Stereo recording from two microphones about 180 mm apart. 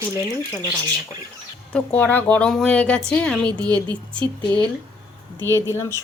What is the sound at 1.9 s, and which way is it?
A woman's voice, 10° left (ahead or behind).